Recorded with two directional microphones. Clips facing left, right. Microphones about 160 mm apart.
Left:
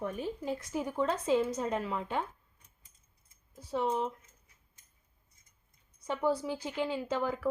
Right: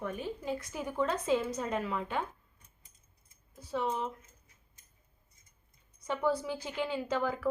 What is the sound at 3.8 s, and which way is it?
Speech, 30° left (ahead or behind).